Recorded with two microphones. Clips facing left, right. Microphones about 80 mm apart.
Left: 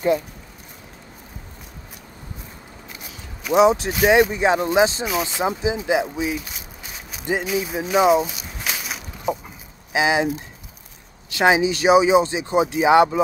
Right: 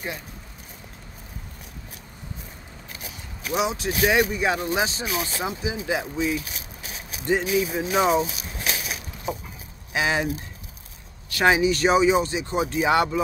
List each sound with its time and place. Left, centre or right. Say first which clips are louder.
3.5 s speech: left 9 dB; left; by 8.3 s centre
9.9 s speech: left 5 dB; centre